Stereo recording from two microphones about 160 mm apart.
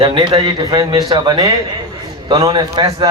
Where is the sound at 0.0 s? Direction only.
30° right (ahead or behind).